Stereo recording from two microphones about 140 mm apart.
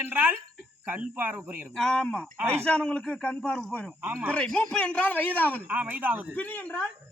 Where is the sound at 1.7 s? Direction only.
5° left (ahead or behind).